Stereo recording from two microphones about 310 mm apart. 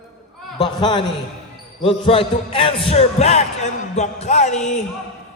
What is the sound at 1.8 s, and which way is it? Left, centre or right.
Music, centre.